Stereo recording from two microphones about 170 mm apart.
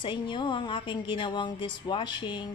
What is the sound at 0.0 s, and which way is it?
A woman's voice, 30° left (ahead or behind).